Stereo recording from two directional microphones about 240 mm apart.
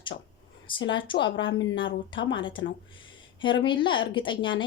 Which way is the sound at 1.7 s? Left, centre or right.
Left.